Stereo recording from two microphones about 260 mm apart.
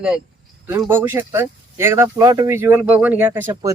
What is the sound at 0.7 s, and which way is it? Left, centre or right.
Speech, centre.